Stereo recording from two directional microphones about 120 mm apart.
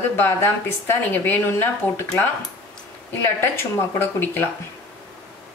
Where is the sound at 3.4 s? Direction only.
20° left (ahead or behind).